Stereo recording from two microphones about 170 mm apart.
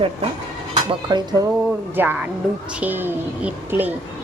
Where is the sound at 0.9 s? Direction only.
25° right (ahead or behind).